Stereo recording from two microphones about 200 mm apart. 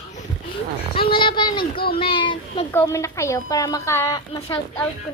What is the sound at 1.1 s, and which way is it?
Speech, 25° left (ahead or behind).